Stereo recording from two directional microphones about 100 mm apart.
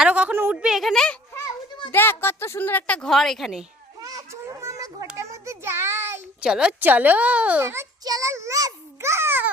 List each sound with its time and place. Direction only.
0.0 s a sound: 10° right (ahead or behind)
0.5 s speech: 5° right (ahead or behind)
1.9 s a woman's voice: 20° left (ahead or behind); by 3.7 s centre (ahead or behind)
4.0 s children playing: 35° right (ahead or behind)
5.1 s child singing: 30° right (ahead or behind)
6.4 s a woman's voice: 10° right (ahead or behind)
7.6 s a child's voice: 25° right (ahead or behind)